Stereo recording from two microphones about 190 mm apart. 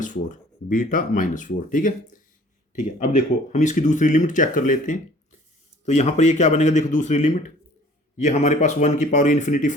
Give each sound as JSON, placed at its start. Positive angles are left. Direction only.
{"t": 0.0, "sound": "speech", "side_deg": 40}